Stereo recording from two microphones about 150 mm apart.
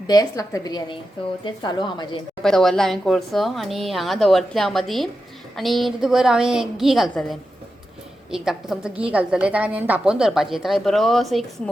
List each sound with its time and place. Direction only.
0.1 s a woman's voice: 25° left (ahead or behind)
2.4 s a woman's voice: centre (ahead or behind)
8.7 s a woman's voice: 5° right (ahead or behind)